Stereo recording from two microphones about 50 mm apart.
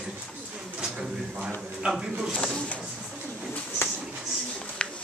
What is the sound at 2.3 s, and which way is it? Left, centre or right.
Speech, centre.